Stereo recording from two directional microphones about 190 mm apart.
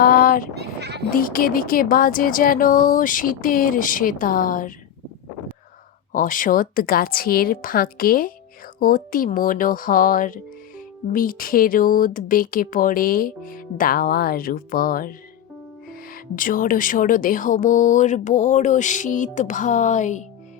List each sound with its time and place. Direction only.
0.0 s a sound: 50° left (ahead or behind)
0.5 s speech: 60° right (ahead or behind)
1.1 s speech: 50° left (ahead or behind)
6.1 s speech: 45° left (ahead or behind)